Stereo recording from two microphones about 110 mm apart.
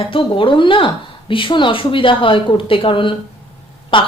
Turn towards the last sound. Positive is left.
turn(degrees=50)  # may be behind; listen again after turning